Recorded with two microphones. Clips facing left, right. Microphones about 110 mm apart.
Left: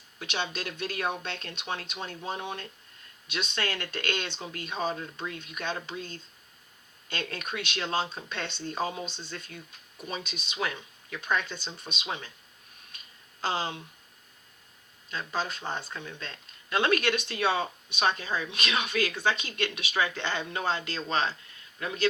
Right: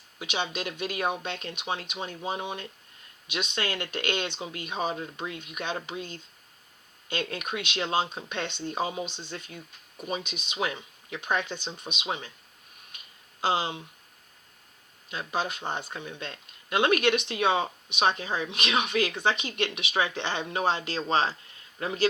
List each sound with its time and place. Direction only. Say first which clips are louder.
0.2 s speech: right 2 dB; 15° right (ahead or behind)
13.4 s speech: right 4 dB; 15° right (ahead or behind)
15.1 s speech: right 2 dB; 15° right (ahead or behind)